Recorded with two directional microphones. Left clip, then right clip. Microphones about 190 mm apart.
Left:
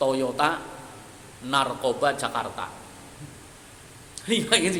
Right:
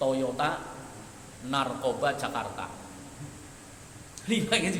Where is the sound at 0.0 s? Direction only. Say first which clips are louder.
Left 4 dB; 25° left (ahead or behind).